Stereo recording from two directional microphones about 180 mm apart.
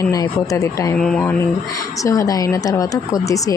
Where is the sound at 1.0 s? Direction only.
5° left (ahead or behind).